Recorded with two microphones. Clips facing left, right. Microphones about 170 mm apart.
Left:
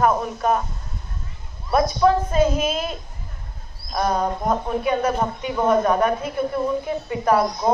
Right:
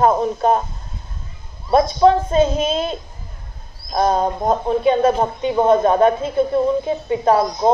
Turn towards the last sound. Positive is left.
turn(degrees=-25)  # may be behind; listen again after turning